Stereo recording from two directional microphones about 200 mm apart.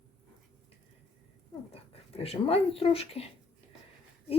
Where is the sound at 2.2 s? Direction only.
30° left (ahead or behind).